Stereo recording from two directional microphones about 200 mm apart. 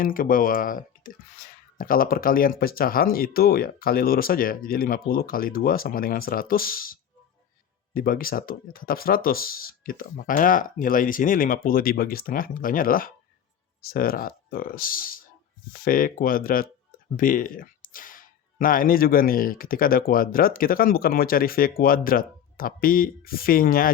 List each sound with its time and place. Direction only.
0.0 s speech: 45° left (ahead or behind)